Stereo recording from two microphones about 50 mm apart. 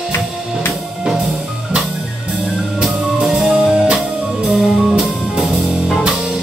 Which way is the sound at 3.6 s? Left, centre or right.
Centre.